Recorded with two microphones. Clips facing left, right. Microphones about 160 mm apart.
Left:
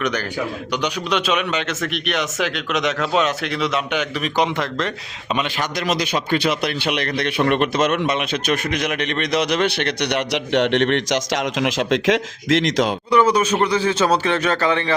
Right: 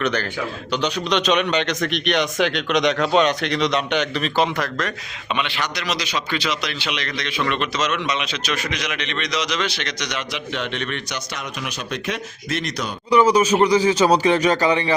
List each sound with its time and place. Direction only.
0.0 s speech: 10° left (ahead or behind)
5.3 s a man's voice: 45° left (ahead or behind); by 12.9 s 90° left
13.1 s speech: 10° right (ahead or behind)